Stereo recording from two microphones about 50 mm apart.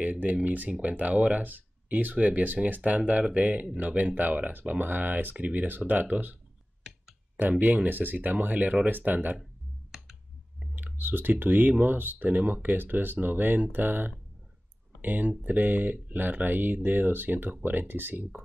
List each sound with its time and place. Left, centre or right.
0.0 s speech: right
7.3 s speech: right
9.4 s a sound: centre
10.7 s speech: right